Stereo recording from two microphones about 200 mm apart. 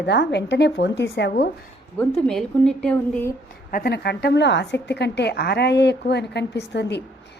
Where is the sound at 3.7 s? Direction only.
50° left (ahead or behind).